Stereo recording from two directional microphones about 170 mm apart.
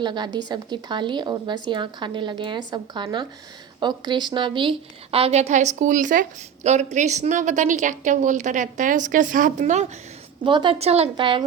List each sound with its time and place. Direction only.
0.0 s a woman's voice: 25° right (ahead or behind); by 9.8 s 45° right (ahead or behind)
10.4 s speech: 30° right (ahead or behind)